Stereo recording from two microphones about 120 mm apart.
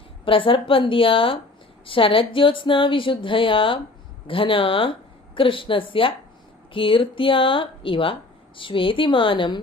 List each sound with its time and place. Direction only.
0.3 s speech: 45° left (ahead or behind)